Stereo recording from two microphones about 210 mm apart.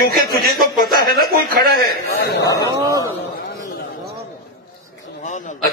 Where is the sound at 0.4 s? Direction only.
45° right (ahead or behind).